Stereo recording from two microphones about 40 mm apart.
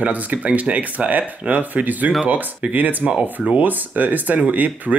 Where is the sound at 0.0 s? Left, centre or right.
Right.